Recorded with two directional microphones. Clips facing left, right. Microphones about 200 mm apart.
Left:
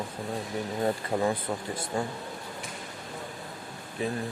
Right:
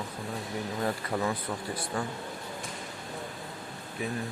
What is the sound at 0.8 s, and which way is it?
Speech, 25° left (ahead or behind).